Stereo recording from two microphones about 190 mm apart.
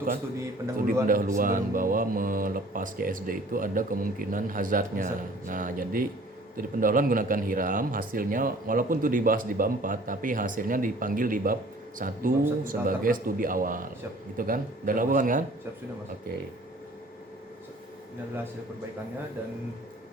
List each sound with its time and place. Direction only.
1.0 s a man's voice: 45° right (ahead or behind)